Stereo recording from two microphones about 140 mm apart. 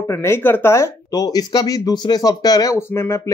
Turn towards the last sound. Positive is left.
turn(degrees=20)  # may be behind; listen again after turning